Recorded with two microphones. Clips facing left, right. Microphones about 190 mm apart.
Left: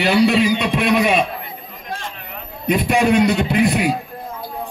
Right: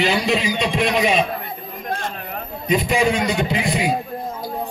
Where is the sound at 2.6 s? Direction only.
60° left (ahead or behind).